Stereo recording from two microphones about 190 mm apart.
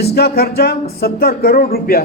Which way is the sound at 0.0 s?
55° left (ahead or behind).